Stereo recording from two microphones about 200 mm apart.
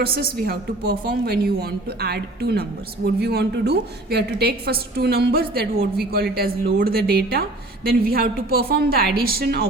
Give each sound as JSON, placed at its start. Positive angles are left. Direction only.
{"t": 0.0, "sound": "a woman's voice", "side_deg": -50}